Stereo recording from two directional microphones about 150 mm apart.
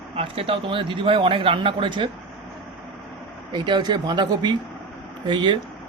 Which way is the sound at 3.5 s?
30° right (ahead or behind).